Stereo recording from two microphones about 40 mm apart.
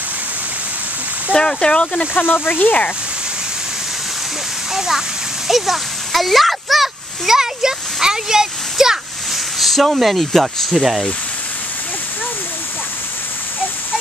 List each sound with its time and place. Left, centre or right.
1.3 s speech: left
2.1 s speech: left
4.7 s a child's voice: centre
9.6 s speech: centre